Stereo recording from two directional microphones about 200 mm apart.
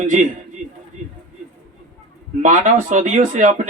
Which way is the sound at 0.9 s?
35° right (ahead or behind).